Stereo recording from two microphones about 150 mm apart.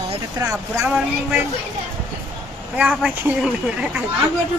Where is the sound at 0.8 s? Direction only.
10° right (ahead or behind).